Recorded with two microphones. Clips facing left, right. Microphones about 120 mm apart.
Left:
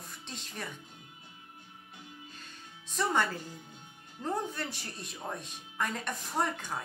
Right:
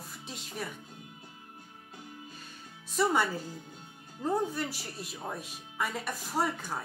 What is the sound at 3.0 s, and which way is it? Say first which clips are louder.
A woman's voice: right 2 dB; 10° right (ahead or behind).